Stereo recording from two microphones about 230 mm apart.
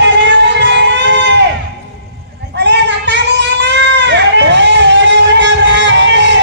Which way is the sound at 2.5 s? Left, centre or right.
Right.